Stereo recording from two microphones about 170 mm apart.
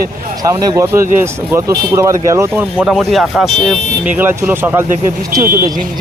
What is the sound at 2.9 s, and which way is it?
Speech, centre (ahead or behind).